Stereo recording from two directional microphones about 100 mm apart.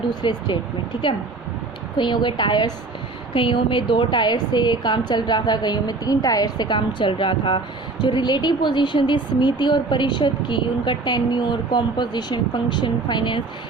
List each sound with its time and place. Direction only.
0.1 s a woman's voice: 45° left (ahead or behind)
2.0 s a woman's voice: 50° left (ahead or behind)